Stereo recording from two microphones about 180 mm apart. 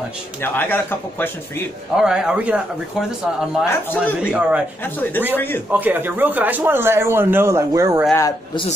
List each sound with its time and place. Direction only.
0.4 s speech: 10° left (ahead or behind)
2.0 s speech: 5° right (ahead or behind)
3.6 s speech: 10° left (ahead or behind)
4.3 s speech: 5° right (ahead or behind)
4.8 s speech: 10° left (ahead or behind)
5.7 s speech: 10° right (ahead or behind)
8.1 s speech: 15° left (ahead or behind)